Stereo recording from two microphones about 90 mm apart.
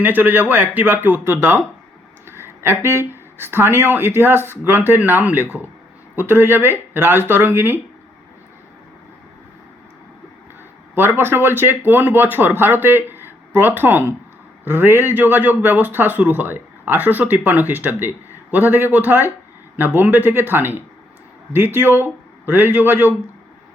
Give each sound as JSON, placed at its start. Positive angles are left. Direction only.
{"t": 0.0, "sound": "a man's voice", "side_deg": -20}
{"t": 10.9, "sound": "a man's voice", "side_deg": -20}